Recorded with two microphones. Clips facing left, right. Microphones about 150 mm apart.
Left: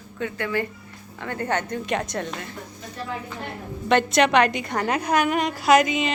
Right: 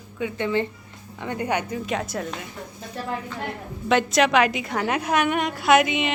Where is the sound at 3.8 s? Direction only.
Centre (ahead or behind).